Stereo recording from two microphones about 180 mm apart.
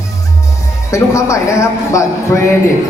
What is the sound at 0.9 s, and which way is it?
A man's voice, 15° left (ahead or behind).